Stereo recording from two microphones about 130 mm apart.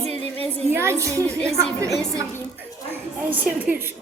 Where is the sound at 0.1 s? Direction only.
50° right (ahead or behind).